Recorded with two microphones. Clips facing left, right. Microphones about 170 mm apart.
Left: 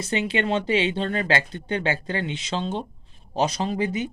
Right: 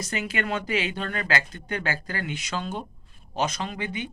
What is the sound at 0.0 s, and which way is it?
A man's voice, 25° left (ahead or behind).